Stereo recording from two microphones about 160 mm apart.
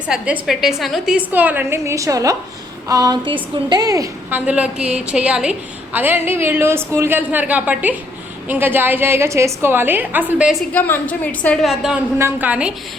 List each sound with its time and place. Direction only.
0.1 s a woman's voice: 5° right (ahead or behind)
10.7 s a woman's voice: 10° left (ahead or behind)
12.2 s a woman's voice: 10° right (ahead or behind)